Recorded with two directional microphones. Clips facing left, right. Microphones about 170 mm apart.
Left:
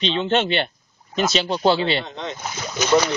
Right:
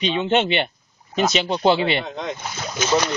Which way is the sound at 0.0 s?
15° right (ahead or behind).